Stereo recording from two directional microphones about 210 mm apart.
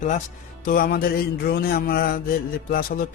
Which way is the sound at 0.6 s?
45° left (ahead or behind).